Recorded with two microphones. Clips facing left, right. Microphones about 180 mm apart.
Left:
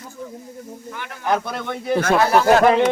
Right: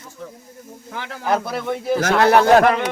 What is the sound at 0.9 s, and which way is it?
Speech, 90° right.